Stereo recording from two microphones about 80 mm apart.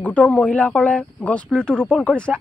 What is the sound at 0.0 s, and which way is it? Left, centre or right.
Speech, centre.